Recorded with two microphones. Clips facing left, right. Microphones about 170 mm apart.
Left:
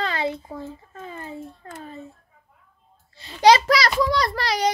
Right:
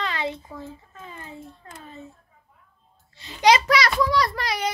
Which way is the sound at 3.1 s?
35° left (ahead or behind).